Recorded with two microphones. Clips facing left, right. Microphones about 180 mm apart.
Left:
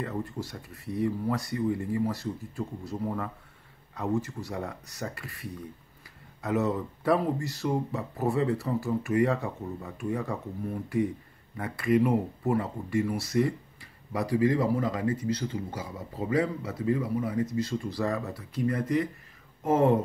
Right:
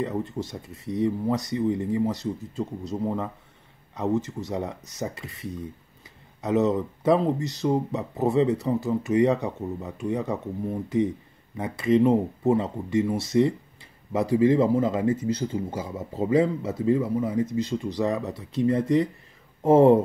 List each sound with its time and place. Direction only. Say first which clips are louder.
0.0 s speech: right 5 dB; 20° right (ahead or behind)